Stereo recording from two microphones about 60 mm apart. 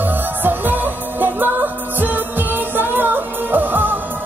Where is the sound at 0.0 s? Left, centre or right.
Right.